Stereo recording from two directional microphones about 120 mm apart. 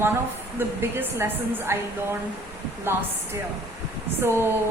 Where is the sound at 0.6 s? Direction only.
20° right (ahead or behind).